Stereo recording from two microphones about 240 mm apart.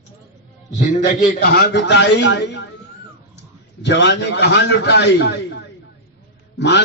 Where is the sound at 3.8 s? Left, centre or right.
Left.